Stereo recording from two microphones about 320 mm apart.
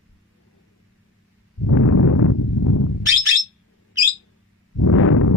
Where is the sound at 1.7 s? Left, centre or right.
Left.